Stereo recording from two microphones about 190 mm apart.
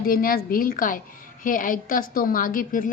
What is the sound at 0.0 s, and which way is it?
A woman's voice, 50° left (ahead or behind).